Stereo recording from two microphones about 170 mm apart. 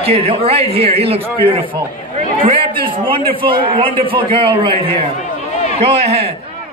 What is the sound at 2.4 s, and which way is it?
A man's voice, 30° right (ahead or behind).